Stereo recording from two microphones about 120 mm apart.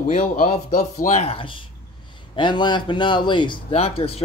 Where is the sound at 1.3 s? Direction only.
45° left (ahead or behind).